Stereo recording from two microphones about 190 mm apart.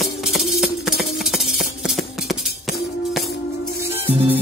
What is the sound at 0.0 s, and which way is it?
Music, centre (ahead or behind).